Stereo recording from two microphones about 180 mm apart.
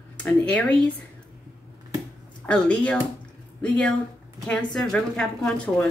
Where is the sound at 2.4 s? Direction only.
5° left (ahead or behind).